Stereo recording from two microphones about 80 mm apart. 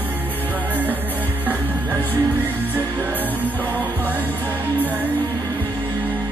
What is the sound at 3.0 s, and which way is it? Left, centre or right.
Music, right.